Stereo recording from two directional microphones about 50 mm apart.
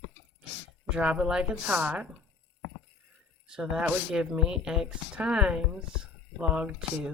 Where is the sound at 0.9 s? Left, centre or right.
Right.